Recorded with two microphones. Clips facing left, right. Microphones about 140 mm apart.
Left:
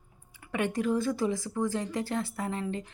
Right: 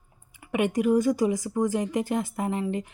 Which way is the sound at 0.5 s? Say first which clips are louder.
Right 6 dB; 15° right (ahead or behind).